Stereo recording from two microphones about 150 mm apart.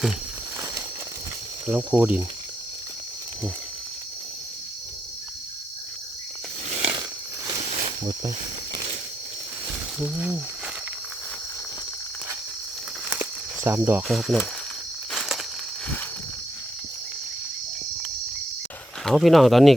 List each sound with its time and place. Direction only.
1.6 s speech: 10° right (ahead or behind)
7.6 s a sound: 45° right (ahead or behind)
10.0 s speech: 10° right (ahead or behind)
13.1 s snake: 15° right (ahead or behind)
14.1 s speech: centre (ahead or behind)
15.1 s a sound: centre (ahead or behind)
19.0 s speech: centre (ahead or behind)